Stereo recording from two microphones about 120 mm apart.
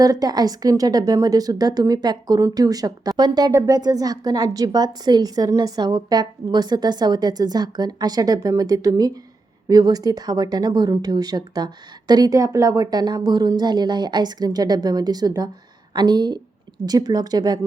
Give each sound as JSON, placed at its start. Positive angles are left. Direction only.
{"t": 0.0, "sound": "a woman's voice", "side_deg": -35}